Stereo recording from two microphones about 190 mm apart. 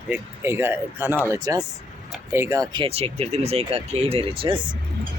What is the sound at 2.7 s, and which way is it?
Speech, 30° right (ahead or behind).